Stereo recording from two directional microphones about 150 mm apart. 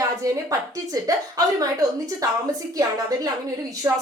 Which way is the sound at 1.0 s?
25° right (ahead or behind).